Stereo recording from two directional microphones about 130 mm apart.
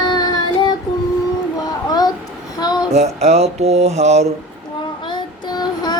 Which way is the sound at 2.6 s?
30° left (ahead or behind).